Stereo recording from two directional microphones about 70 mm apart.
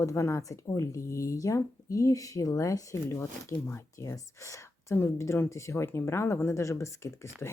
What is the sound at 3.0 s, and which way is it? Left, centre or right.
Speech, left.